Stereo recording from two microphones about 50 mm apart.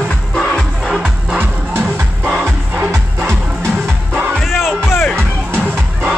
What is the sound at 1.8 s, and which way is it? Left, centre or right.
Music, right.